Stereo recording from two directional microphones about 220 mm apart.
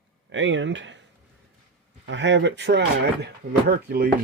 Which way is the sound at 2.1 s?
55° right (ahead or behind).